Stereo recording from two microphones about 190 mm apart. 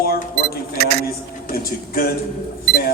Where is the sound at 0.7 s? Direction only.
55° right (ahead or behind).